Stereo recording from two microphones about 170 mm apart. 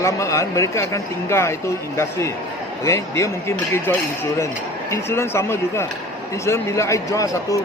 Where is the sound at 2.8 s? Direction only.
15° left (ahead or behind).